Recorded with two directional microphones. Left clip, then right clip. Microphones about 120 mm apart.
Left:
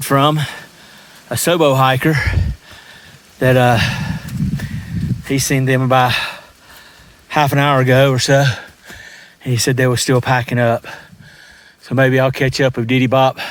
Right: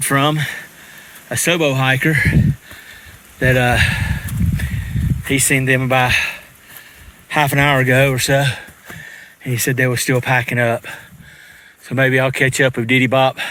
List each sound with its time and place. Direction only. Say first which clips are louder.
0.0 s speech: left 2 dB; 35° left (ahead or behind)
1.5 s speech: left 3 dB; 55° left (ahead or behind)
3.8 s a sound: right 2 dB; 25° left (ahead or behind)
5.2 s speech: right 2 dB; 20° left (ahead or behind); by 6.4 s 45° left (ahead or behind)
7.3 s speech: left 1 dB; 30° left (ahead or behind)